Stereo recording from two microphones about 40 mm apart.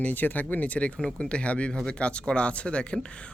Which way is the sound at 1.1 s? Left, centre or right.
Left.